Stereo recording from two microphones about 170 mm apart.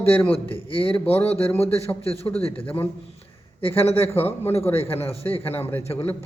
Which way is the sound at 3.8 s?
35° left (ahead or behind).